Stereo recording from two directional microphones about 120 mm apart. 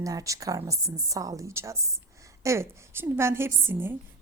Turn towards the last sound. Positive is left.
turn(degrees=-20)  # may be behind; listen again after turning